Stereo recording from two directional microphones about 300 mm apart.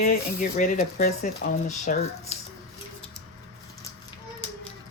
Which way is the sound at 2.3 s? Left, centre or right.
Left.